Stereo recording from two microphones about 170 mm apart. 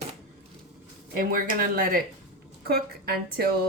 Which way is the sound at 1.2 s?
55° right (ahead or behind).